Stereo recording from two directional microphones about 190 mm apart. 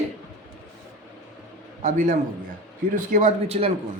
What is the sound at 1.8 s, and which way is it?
A man's voice, 45° right (ahead or behind).